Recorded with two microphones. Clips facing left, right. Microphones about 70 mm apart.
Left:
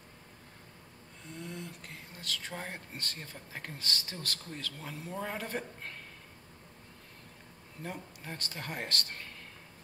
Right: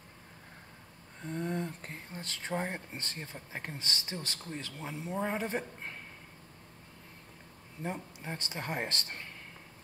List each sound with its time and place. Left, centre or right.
1.2 s speech: right; by 5.9 s centre
7.8 s speech: centre